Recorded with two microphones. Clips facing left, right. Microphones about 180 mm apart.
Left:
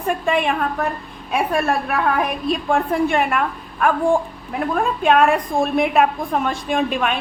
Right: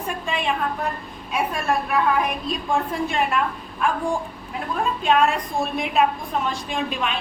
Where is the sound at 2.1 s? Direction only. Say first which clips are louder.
Left 3 dB; 55° left (ahead or behind).